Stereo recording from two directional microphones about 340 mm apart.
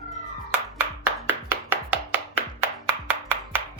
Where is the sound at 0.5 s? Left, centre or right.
Centre.